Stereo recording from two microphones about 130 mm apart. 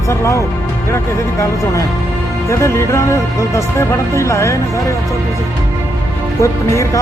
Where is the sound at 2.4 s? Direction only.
20° left (ahead or behind).